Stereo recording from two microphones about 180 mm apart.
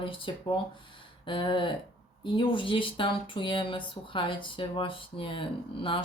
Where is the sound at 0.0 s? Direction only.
25° left (ahead or behind).